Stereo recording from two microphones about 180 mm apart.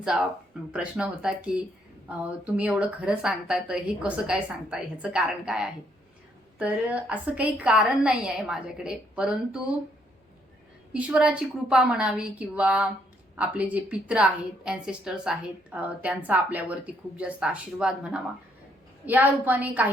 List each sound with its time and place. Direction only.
0.0 s a woman's voice: 5° right (ahead or behind)
10.9 s a woman's voice: 5° right (ahead or behind)